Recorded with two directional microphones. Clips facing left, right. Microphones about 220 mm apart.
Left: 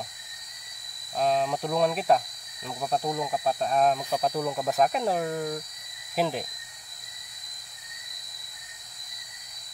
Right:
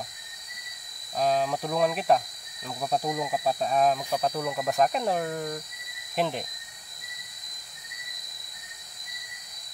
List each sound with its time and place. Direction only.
1.1 s speech: centre (ahead or behind)